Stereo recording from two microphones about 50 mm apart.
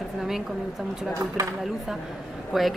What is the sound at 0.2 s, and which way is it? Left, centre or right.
Speech, centre.